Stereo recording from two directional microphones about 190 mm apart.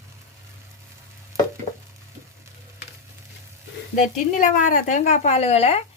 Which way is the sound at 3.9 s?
45° left (ahead or behind).